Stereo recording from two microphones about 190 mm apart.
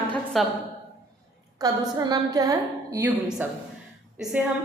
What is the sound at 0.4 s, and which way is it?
Speech, centre (ahead or behind).